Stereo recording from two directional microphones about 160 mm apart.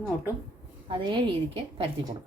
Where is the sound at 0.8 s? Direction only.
30° right (ahead or behind).